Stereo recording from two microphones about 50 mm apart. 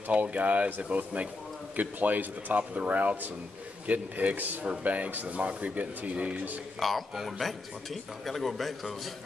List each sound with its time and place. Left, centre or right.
0.1 s speech: right
6.8 s speech: centre